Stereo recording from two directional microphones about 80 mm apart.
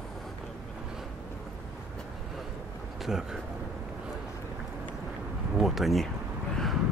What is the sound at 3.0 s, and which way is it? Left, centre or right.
Speech, centre.